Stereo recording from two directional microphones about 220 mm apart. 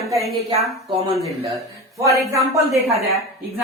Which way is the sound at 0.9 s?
20° right (ahead or behind).